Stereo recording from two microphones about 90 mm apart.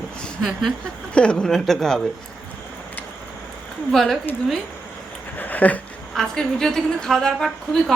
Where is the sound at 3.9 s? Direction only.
Centre (ahead or behind).